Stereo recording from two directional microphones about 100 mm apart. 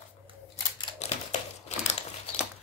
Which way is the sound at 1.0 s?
90° left.